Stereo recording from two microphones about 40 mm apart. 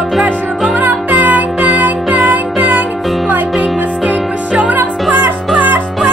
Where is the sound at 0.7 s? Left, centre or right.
Right.